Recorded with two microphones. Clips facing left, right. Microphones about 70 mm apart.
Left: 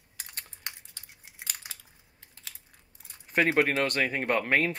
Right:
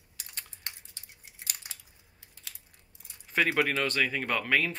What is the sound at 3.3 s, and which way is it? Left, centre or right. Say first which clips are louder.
Speech: left 3 dB; left.